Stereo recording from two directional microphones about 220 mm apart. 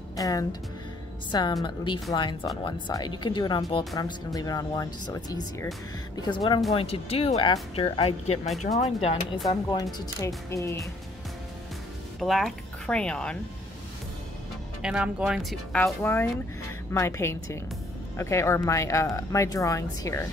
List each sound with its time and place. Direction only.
0.1 s speech: 15° left (ahead or behind)
12.2 s speech: centre (ahead or behind)
14.8 s speech: 5° right (ahead or behind); by 20.2 s 15° left (ahead or behind)